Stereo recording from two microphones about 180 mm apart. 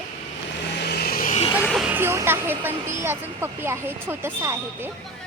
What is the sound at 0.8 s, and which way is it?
Vehicle, 60° left (ahead or behind).